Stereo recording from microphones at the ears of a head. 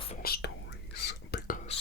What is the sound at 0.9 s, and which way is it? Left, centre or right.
Whispering, left.